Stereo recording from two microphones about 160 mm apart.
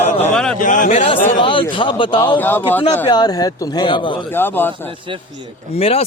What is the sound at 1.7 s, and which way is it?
Speech, 30° left (ahead or behind).